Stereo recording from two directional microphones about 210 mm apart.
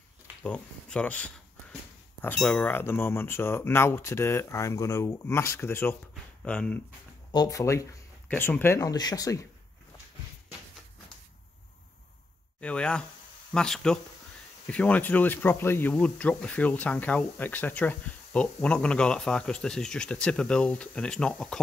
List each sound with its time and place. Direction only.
0.4 s speech: 5° left (ahead or behind)
7.3 s speech: 15° left (ahead or behind)
12.5 s speech: 5° left (ahead or behind)